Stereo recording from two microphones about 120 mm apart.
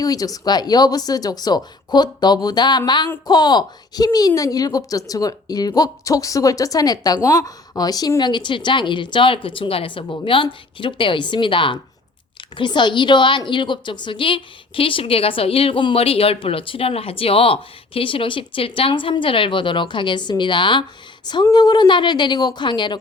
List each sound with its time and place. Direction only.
0.0 s a woman's voice: 30° left (ahead or behind)